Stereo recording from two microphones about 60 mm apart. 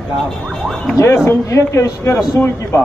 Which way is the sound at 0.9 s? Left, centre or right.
Left.